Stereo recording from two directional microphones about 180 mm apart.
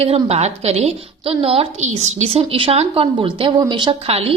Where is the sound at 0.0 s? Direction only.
35° right (ahead or behind).